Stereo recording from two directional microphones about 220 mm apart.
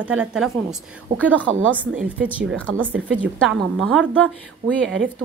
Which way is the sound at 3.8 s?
Centre (ahead or behind).